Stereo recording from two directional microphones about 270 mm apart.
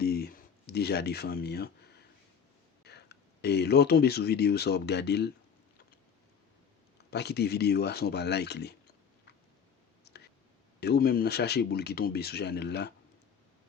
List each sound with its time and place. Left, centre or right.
0.0 s a sound: left
2.8 s speech: left
7.1 s speech: left
10.0 s whispering: left
10.8 s speech: left